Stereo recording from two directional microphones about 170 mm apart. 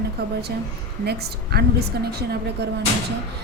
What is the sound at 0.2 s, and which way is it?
A woman's voice, 70° right (ahead or behind).